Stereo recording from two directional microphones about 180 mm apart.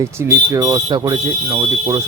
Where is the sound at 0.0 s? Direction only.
15° right (ahead or behind).